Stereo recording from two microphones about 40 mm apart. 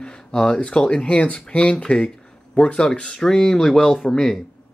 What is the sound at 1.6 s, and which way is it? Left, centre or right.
Speech, centre.